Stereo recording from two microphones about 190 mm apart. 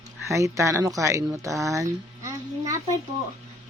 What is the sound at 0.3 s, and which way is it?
A child's voice, 15° right (ahead or behind).